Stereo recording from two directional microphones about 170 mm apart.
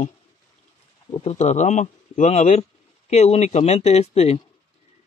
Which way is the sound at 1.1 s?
35° left (ahead or behind).